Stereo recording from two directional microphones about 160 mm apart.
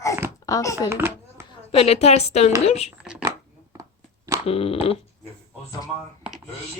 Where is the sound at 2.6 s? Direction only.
40° left (ahead or behind).